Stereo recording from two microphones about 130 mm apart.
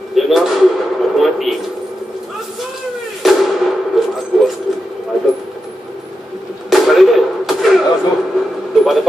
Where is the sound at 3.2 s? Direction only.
Centre (ahead or behind).